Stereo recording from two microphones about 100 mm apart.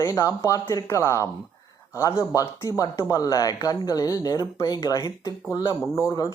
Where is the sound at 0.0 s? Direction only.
35° left (ahead or behind).